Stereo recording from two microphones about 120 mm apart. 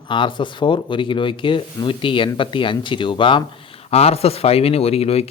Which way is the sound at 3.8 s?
60° left (ahead or behind).